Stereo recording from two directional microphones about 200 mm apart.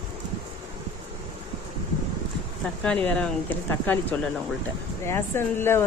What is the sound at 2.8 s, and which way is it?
Speech, 5° left (ahead or behind).